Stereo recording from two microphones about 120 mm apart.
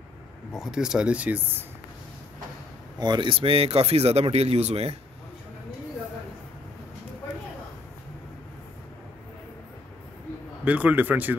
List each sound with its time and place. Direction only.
0.5 s speech: 5° right (ahead or behind)
3.0 s speech: 40° right (ahead or behind); by 4.9 s 65° right (ahead or behind)
10.6 s speech: 15° right (ahead or behind)